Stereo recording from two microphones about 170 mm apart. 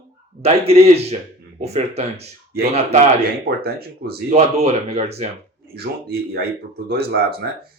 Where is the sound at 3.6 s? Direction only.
65° right (ahead or behind).